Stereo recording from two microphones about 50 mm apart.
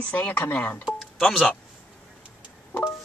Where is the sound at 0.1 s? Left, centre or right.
Left.